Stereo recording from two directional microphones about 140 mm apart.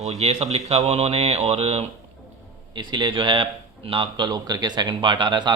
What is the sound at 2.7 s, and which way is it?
Speech, 35° right (ahead or behind).